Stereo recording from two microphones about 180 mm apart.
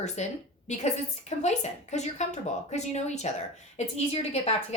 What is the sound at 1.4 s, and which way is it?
A woman's voice, 40° left (ahead or behind).